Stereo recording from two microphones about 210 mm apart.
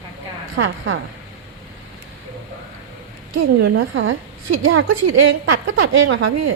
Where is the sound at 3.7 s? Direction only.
75° right (ahead or behind).